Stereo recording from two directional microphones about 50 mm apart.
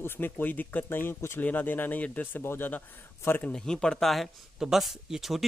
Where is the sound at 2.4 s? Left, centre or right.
Left.